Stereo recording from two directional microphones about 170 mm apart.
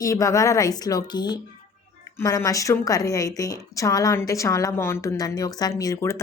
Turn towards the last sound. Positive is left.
turn(degrees=20)  # may be behind; listen again after turning